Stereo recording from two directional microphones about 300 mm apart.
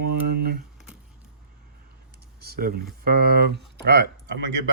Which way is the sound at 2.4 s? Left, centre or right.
Right.